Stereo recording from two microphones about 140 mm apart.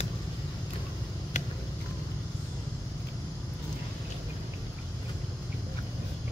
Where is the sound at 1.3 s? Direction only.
60° left (ahead or behind).